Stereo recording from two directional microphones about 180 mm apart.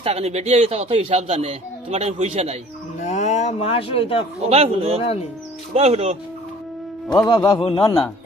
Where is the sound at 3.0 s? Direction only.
40° left (ahead or behind).